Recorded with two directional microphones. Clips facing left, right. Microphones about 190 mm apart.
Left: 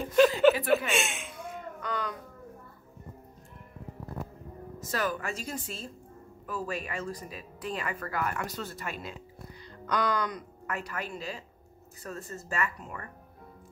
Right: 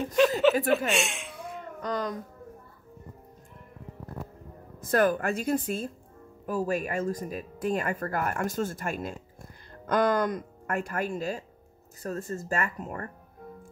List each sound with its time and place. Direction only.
0.0 s speech: centre (ahead or behind)
1.8 s speech: 40° right (ahead or behind)
4.7 s speech: 55° right (ahead or behind)
6.4 s speech: 45° right (ahead or behind)